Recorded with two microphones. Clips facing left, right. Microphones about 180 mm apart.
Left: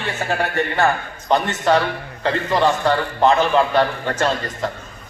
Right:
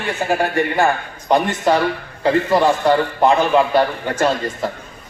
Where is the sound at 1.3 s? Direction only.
10° right (ahead or behind).